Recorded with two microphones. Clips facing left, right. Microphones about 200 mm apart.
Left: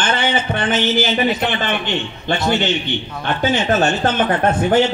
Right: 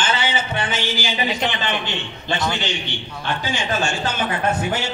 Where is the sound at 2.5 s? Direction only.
55° left (ahead or behind).